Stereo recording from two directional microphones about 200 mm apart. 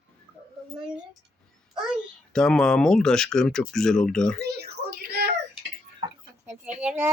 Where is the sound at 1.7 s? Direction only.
Centre (ahead or behind).